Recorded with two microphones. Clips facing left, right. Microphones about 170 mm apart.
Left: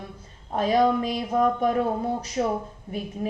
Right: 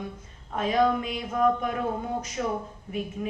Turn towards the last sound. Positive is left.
turn(degrees=35)  # may be behind; listen again after turning